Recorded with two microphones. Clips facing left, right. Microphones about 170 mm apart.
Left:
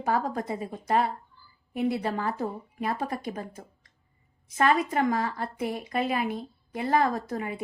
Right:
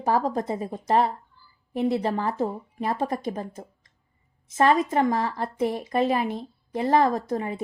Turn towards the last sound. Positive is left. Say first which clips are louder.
# right 4 dB
turn(degrees=-30)  # may be behind; listen again after turning